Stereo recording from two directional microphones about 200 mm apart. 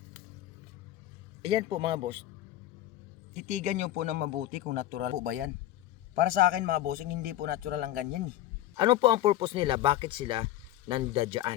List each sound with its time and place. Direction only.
1.4 s speech: 25° right (ahead or behind)
3.3 s speech: 35° right (ahead or behind)
4.2 s speech: 45° right (ahead or behind)
8.7 s speech: 25° right (ahead or behind)